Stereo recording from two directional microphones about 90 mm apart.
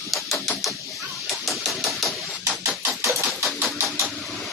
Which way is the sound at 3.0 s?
30° right (ahead or behind).